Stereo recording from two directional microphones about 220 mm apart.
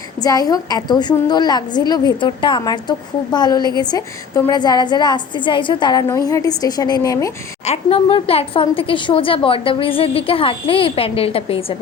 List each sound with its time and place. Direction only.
0.2 s a woman's voice: 15° left (ahead or behind)
7.6 s speech: 30° left (ahead or behind)